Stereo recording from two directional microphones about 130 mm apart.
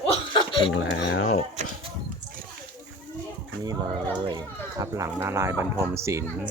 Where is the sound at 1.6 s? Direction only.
65° right (ahead or behind).